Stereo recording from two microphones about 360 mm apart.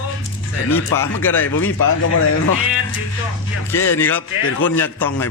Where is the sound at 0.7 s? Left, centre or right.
Centre.